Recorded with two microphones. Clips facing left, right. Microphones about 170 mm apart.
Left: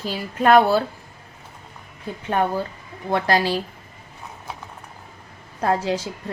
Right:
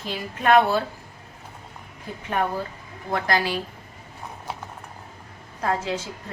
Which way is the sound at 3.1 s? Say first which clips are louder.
Left 4 dB; 30° left (ahead or behind).